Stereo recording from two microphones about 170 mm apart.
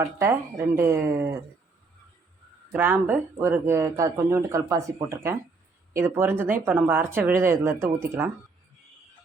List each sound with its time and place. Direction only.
0.0 s speech: 15° right (ahead or behind)
2.7 s speech: 10° right (ahead or behind)